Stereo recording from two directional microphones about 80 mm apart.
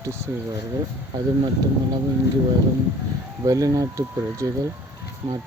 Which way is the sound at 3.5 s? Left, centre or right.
Right.